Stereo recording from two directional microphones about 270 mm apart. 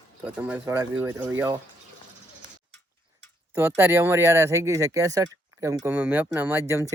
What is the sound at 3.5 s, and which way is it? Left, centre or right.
Speech, centre.